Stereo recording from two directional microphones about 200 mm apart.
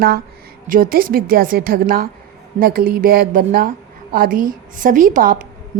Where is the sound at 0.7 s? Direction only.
45° right (ahead or behind).